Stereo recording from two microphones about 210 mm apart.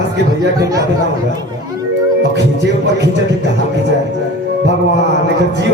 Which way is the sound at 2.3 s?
55° right (ahead or behind).